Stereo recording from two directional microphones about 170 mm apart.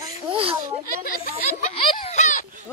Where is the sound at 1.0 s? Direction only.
55° left (ahead or behind).